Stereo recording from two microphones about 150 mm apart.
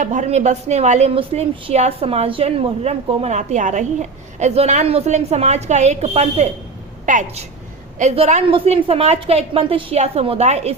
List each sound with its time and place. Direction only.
0.0 s a woman's voice: 55° right (ahead or behind)
7.0 s a woman's voice: 55° right (ahead or behind)